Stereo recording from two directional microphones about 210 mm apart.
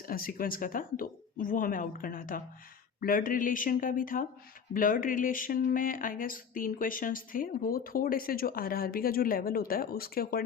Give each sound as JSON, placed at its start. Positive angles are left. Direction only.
{"t": 0.0, "sound": "speech", "side_deg": 45}